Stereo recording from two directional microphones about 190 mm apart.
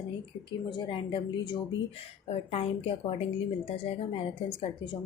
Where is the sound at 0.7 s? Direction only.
25° left (ahead or behind).